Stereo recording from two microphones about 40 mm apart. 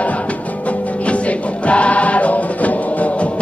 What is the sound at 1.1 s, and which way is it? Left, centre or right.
Music, left.